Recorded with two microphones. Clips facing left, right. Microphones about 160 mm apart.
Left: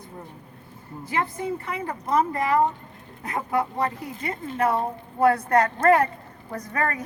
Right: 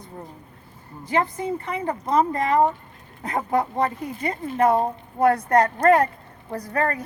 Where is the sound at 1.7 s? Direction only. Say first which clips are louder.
Right 3 dB; 30° right (ahead or behind).